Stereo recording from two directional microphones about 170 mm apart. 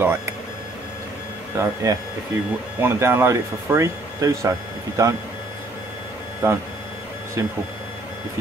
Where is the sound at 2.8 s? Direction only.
15° right (ahead or behind).